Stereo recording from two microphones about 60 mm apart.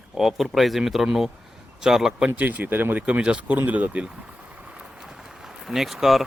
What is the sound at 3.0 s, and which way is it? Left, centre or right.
Speech, centre.